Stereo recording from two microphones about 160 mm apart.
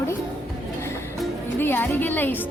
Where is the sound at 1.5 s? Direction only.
15° left (ahead or behind).